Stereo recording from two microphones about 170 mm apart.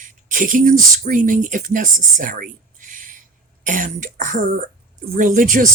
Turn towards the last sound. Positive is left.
turn(degrees=-50)  # may be behind; listen again after turning